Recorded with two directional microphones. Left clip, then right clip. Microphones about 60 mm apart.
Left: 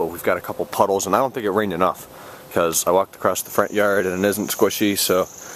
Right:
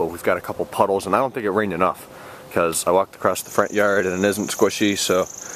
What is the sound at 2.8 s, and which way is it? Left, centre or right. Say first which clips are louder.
Speech: even; centre.